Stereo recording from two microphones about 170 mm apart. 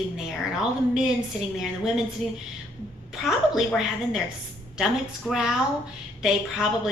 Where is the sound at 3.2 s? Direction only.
Centre (ahead or behind).